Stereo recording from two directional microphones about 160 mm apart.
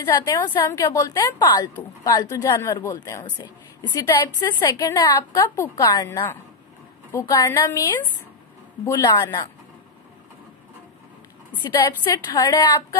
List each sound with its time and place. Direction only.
0.5 s a woman's voice: 20° left (ahead or behind)
8.8 s a woman's voice: 25° left (ahead or behind)
11.6 s a woman's voice: 25° left (ahead or behind)